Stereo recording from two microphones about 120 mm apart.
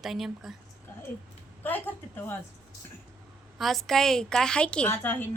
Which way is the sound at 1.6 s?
15° left (ahead or behind).